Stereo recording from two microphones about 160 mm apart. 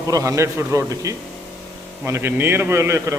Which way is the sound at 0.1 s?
20° right (ahead or behind).